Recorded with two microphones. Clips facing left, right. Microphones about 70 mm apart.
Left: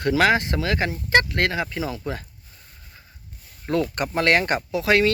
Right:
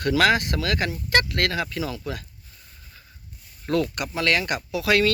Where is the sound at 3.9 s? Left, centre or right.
Left.